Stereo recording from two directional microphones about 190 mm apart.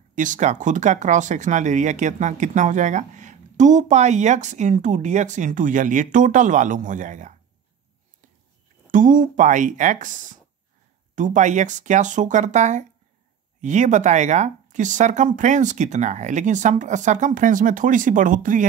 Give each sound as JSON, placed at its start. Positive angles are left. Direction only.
{"t": 0.1, "sound": "speech", "side_deg": -45}
{"t": 8.9, "sound": "speech", "side_deg": -45}